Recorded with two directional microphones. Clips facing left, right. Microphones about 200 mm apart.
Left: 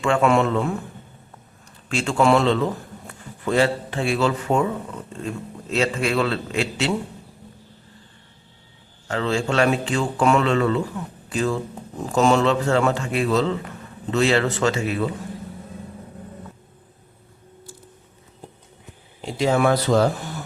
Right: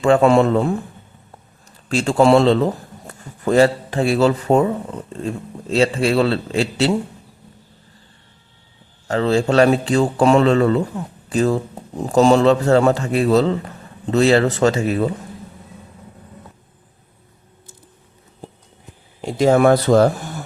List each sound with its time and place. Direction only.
0.0 s speech: 35° right (ahead or behind)
1.9 s speech: 35° right (ahead or behind)
5.7 s speech: 30° right (ahead or behind)
9.0 s speech: 35° right (ahead or behind)
19.2 s speech: 45° right (ahead or behind)